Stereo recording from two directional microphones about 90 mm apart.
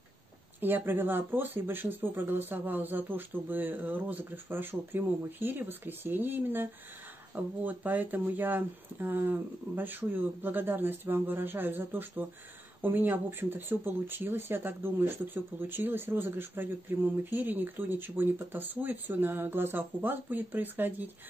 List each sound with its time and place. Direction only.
0.6 s speech: 20° right (ahead or behind)